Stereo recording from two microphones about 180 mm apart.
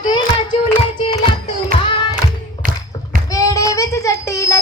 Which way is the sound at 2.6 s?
50° right (ahead or behind).